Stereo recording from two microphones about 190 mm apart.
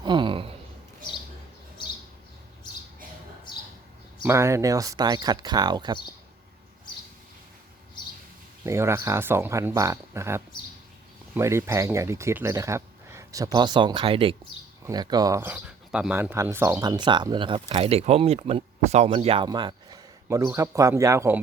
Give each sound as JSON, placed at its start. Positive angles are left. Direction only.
{"t": 0.0, "sound": "a sound", "side_deg": -25}
{"t": 4.2, "sound": "speech", "side_deg": -15}
{"t": 8.6, "sound": "speech", "side_deg": -15}